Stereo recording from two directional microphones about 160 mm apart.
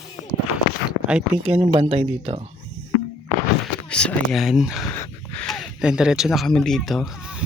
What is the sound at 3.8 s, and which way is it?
Speech, 5° left (ahead or behind).